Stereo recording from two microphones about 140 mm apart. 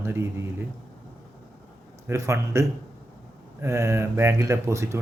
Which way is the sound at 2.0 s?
20° right (ahead or behind).